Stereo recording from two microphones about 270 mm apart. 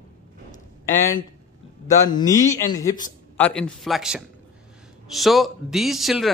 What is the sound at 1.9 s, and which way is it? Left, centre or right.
A man's voice, centre.